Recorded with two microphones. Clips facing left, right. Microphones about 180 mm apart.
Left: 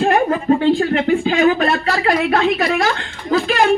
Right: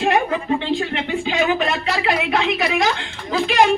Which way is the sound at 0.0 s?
45° left (ahead or behind).